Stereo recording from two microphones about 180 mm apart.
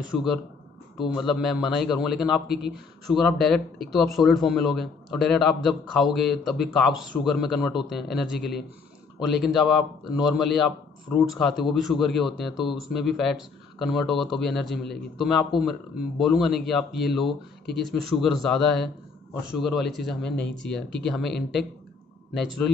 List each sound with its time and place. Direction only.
0.1 s a man's voice: centre (ahead or behind)
20.2 s speech: 70° left (ahead or behind)
20.6 s a man's voice: 5° left (ahead or behind)